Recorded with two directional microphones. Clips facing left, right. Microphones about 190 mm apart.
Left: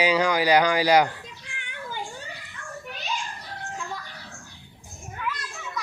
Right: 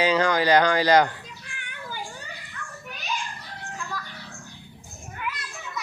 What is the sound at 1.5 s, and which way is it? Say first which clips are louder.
Children playing: left 2 dB; 20° left (ahead or behind).